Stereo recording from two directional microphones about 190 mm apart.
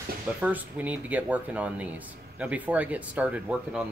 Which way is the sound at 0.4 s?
10° right (ahead or behind).